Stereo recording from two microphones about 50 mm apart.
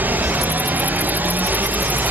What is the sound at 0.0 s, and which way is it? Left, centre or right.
Music, right.